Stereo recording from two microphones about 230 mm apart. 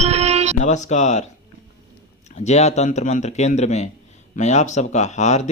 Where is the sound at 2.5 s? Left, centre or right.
Left.